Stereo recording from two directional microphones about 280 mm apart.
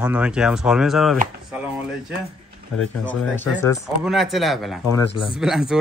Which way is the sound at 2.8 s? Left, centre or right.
Centre.